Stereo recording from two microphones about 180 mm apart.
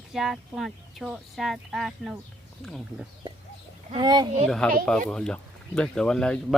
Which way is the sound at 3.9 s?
25° right (ahead or behind).